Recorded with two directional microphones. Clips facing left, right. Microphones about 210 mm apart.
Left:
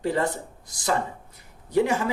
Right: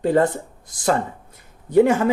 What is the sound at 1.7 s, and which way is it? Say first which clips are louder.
Speech: right 7 dB; 55° right (ahead or behind).